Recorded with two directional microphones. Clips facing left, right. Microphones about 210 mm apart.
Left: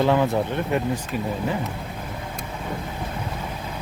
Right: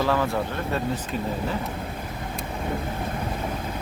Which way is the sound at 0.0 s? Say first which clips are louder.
Left 4 dB; 20° left (ahead or behind).